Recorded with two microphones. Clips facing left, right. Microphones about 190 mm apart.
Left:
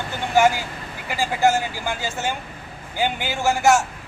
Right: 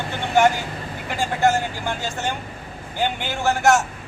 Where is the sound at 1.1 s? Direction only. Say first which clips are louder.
Even; 5° left (ahead or behind).